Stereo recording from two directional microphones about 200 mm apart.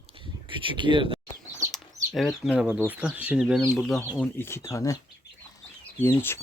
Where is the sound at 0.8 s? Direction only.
25° right (ahead or behind).